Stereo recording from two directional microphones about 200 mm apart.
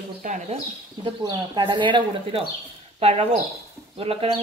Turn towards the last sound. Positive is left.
turn(degrees=-30)  # may be behind; listen again after turning